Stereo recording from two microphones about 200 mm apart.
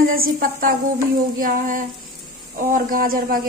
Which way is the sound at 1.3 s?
45° right (ahead or behind).